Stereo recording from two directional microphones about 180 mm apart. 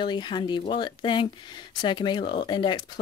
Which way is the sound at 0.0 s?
25° left (ahead or behind).